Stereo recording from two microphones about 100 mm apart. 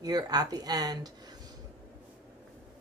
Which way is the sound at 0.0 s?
40° right (ahead or behind).